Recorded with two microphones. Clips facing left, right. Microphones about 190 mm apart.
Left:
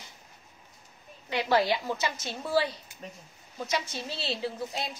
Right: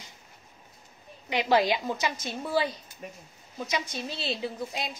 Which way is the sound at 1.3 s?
15° right (ahead or behind).